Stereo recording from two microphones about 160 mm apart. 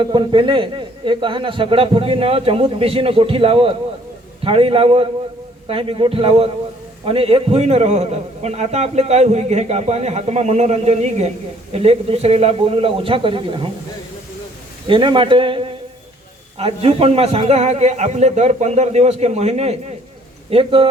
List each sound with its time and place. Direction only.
0.0 s a man's voice: 30° right (ahead or behind)
14.8 s a man's voice: 30° right (ahead or behind)